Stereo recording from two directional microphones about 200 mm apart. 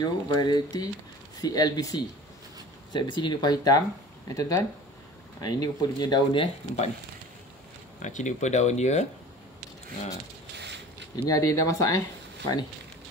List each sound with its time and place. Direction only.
0.0 s speech: 20° left (ahead or behind)
8.0 s speech: 40° left (ahead or behind)
11.2 s speech: 15° left (ahead or behind)